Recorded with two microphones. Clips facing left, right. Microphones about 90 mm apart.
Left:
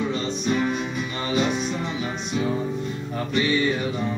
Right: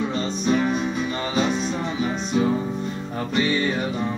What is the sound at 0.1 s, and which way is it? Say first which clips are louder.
Music: right 1 dB; 40° right (ahead or behind).